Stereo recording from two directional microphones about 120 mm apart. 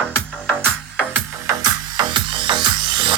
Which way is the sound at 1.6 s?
35° right (ahead or behind).